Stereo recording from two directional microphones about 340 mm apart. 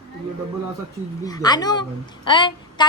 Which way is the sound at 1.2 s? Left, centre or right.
Centre.